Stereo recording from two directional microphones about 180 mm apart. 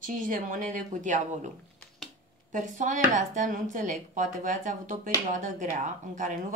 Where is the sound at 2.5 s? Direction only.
45° right (ahead or behind).